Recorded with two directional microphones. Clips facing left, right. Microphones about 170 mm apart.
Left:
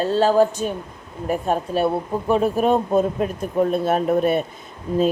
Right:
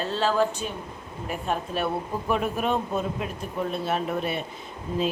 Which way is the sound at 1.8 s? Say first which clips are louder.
Left 7 dB; 30° left (ahead or behind).